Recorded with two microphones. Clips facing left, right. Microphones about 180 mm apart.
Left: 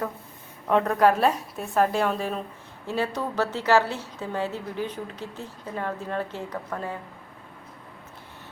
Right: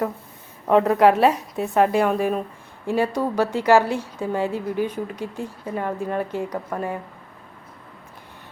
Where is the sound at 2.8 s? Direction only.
15° right (ahead or behind).